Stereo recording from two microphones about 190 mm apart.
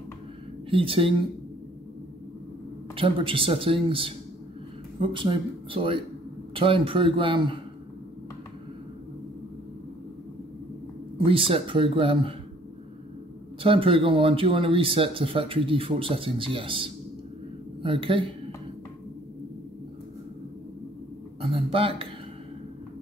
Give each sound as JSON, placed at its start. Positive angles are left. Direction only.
{"t": 0.7, "sound": "speech", "side_deg": -30}
{"t": 3.0, "sound": "speech", "side_deg": -30}
{"t": 11.1, "sound": "speech", "side_deg": -30}
{"t": 13.6, "sound": "speech", "side_deg": -30}
{"t": 21.4, "sound": "a sound", "side_deg": -30}